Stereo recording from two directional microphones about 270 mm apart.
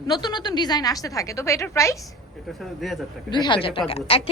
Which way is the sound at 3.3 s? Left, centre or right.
Centre.